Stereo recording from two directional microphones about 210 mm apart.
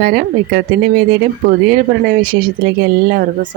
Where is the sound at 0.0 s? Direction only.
45° right (ahead or behind).